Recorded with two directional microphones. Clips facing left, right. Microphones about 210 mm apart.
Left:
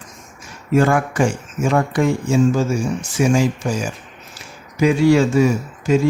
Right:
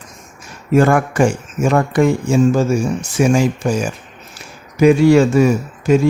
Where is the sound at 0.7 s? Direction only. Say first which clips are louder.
Right 3 dB; 55° right (ahead or behind).